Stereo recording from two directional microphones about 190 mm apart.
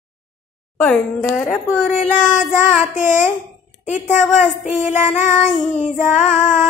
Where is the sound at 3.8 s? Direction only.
40° left (ahead or behind).